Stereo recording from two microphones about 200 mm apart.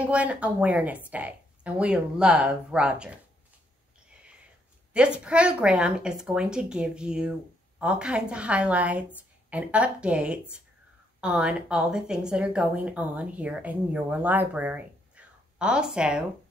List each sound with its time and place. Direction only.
0.0 s a woman's voice: 5° right (ahead or behind)
4.9 s speech: 5° right (ahead or behind)